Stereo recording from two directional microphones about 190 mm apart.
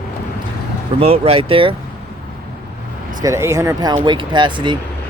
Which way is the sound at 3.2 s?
15° right (ahead or behind).